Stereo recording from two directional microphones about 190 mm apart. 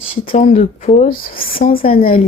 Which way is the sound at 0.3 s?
35° left (ahead or behind).